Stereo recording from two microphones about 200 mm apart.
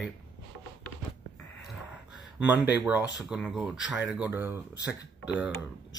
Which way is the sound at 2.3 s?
5° right (ahead or behind).